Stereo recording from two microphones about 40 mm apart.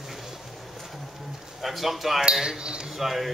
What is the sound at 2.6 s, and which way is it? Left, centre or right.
Speech, right.